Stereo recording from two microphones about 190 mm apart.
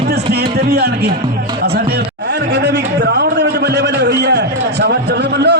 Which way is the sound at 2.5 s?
65° right (ahead or behind).